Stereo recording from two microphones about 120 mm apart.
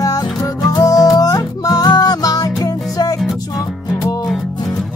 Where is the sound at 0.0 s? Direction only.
30° left (ahead or behind).